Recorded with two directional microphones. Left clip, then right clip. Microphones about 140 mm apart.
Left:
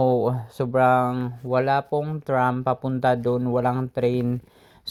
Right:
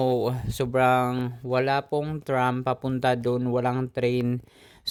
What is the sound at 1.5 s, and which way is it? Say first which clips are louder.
Speech: left 3 dB; centre (ahead or behind).